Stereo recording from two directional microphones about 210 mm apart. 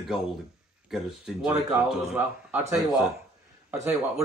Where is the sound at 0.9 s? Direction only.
Centre (ahead or behind).